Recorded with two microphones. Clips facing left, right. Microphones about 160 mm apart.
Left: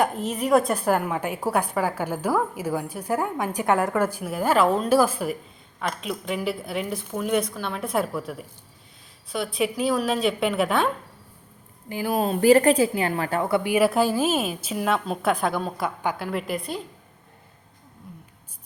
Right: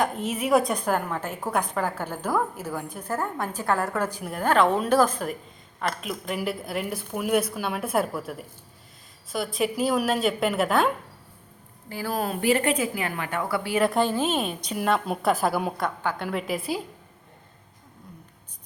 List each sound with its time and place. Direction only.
0.0 s a woman's voice: centre (ahead or behind)
11.9 s a woman's voice: 20° left (ahead or behind)
12.4 s a woman's voice: 40° left (ahead or behind); by 16.8 s 5° right (ahead or behind)